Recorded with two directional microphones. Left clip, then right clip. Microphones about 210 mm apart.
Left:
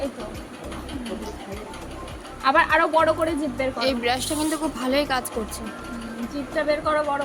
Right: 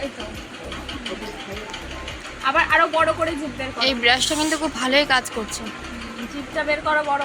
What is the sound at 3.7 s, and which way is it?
A woman's voice, 5° left (ahead or behind).